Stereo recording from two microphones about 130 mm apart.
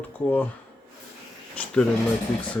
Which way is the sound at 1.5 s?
5° left (ahead or behind).